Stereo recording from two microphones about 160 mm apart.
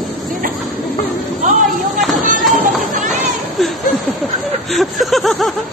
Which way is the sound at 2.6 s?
55° right (ahead or behind).